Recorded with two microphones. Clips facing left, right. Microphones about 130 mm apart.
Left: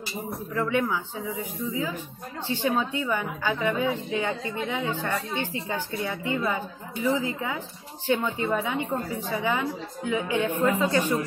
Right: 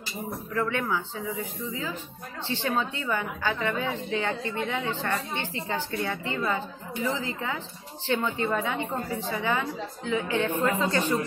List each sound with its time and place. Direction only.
0.3 s a woman's voice: 10° left (ahead or behind)